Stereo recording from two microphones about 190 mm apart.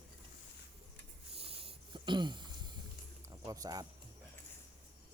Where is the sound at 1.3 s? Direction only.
30° right (ahead or behind).